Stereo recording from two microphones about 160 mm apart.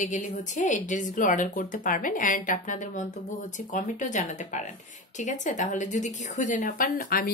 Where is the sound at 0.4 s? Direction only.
50° left (ahead or behind).